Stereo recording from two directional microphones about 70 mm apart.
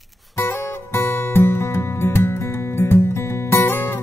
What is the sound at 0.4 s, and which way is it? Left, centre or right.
Music, left.